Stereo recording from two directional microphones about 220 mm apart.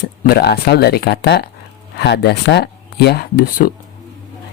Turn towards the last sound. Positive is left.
turn(degrees=45)  # may be behind; listen again after turning